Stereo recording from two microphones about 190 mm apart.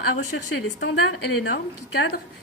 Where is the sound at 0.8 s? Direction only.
75° left (ahead or behind).